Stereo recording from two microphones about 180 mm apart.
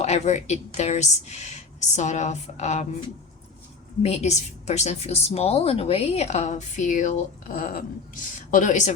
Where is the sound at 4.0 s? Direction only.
40° left (ahead or behind).